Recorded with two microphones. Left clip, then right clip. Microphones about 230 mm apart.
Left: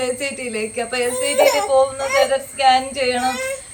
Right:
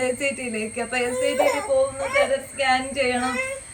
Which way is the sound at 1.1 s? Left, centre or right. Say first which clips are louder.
Left 3 dB; left.